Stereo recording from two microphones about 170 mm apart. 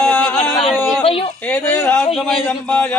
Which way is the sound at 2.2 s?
5° left (ahead or behind).